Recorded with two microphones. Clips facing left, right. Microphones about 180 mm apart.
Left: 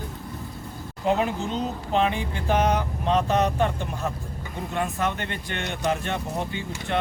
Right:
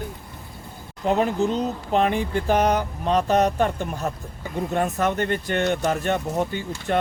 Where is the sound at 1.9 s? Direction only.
45° right (ahead or behind).